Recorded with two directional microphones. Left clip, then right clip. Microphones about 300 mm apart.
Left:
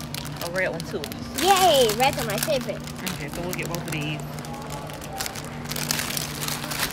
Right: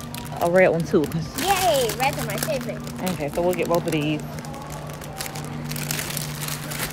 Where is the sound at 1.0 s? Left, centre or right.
Left.